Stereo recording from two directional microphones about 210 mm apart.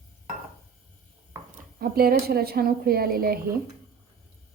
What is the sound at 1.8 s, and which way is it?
A woman's voice, 45° right (ahead or behind).